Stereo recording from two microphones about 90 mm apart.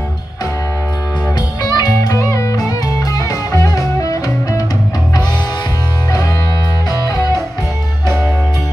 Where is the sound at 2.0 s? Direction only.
35° left (ahead or behind).